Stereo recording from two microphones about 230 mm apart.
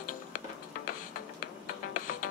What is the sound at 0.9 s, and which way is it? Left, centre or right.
Music, left.